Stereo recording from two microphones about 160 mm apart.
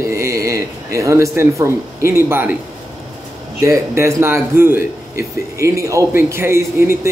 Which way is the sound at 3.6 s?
20° right (ahead or behind).